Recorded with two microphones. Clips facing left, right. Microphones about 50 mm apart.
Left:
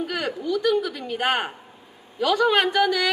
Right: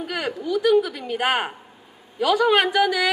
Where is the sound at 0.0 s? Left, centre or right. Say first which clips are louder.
Even; centre.